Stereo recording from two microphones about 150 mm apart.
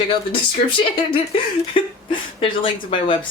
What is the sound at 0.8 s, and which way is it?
A woman's voice, 35° left (ahead or behind).